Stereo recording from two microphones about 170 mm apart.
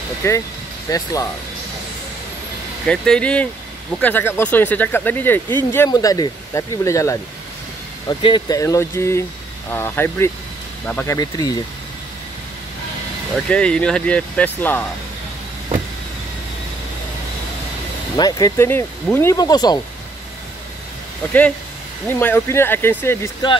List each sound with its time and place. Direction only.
0.2 s speech: 20° left (ahead or behind)
2.9 s speech: 5° left (ahead or behind)
11.1 s speech: 20° left (ahead or behind)
13.5 s speech: 5° left (ahead or behind)
18.1 s speech: 20° left (ahead or behind)
21.3 s speech: 10° left (ahead or behind)